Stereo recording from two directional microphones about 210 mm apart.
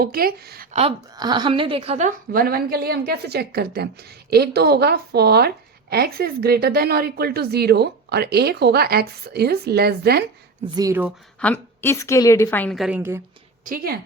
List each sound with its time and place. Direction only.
0.0 s a woman's voice: 45° right (ahead or behind)
1.1 s a woman's voice: 20° right (ahead or behind); by 10.2 s 50° right (ahead or behind)
10.8 s speech: 10° right (ahead or behind)
11.3 s a woman's voice: 5° left (ahead or behind)
13.0 s speech: 10° right (ahead or behind)
13.7 s a woman's voice: 45° right (ahead or behind)